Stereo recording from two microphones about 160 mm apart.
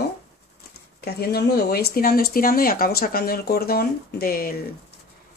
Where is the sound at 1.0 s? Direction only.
85° left.